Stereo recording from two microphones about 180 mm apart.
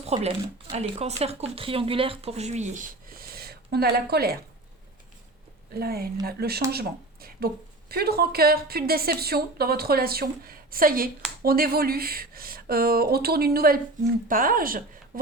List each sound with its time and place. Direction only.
0.0 s speech: 35° right (ahead or behind); by 4.4 s 60° right (ahead or behind)
5.8 s a woman's voice: 60° right (ahead or behind)